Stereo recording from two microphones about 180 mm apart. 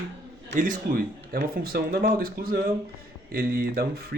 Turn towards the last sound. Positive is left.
turn(degrees=-60)  # may be behind; listen again after turning